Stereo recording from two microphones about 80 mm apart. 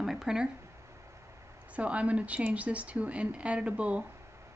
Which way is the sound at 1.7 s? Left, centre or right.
Centre.